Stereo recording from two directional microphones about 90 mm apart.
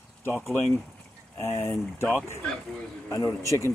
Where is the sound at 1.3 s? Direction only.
30° left (ahead or behind).